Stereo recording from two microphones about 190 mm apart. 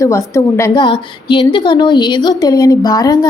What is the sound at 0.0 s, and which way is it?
A woman's voice, 15° left (ahead or behind).